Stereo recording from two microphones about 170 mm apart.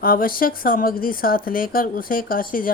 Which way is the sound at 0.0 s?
55° left (ahead or behind).